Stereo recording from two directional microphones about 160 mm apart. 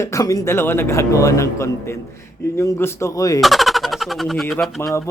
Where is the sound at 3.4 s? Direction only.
Centre (ahead or behind).